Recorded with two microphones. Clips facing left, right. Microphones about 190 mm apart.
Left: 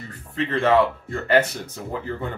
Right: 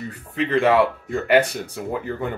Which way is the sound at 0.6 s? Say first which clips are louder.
Right 1 dB; 15° right (ahead or behind).